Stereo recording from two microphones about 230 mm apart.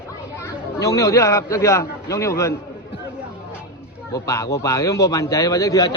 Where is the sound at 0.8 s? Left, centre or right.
Centre.